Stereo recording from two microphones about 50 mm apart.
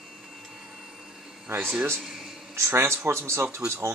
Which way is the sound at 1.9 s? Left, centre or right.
Centre.